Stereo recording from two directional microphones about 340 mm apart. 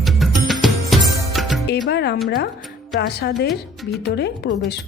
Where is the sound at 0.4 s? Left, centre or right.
Centre.